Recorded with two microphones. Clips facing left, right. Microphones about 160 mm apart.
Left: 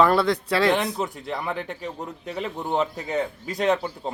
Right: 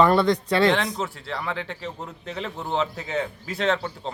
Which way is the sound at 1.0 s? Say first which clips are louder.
Left 2 dB; 15° left (ahead or behind).